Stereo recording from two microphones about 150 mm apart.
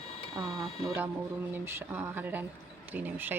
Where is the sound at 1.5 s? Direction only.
15° right (ahead or behind).